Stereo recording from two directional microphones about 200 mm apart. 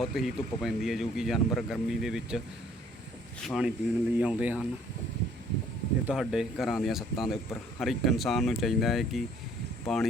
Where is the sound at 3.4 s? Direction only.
Centre (ahead or behind).